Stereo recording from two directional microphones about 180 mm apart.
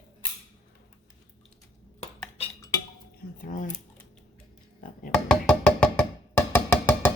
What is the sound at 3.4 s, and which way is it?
Typewriter, 50° left (ahead or behind).